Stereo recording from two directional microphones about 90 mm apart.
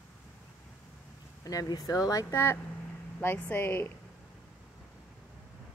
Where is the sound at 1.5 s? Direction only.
45° left (ahead or behind).